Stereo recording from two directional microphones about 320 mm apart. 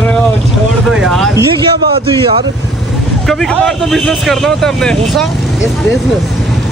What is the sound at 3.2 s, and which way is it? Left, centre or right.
Speech, centre.